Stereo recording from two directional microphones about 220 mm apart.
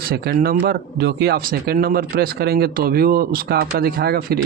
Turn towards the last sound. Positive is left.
turn(degrees=-45)  # may be behind; listen again after turning